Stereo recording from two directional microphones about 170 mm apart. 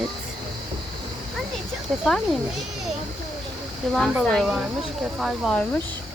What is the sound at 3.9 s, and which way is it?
Speech, centre (ahead or behind).